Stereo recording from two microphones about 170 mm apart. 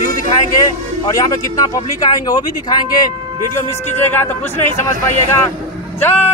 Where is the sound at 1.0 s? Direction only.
20° left (ahead or behind).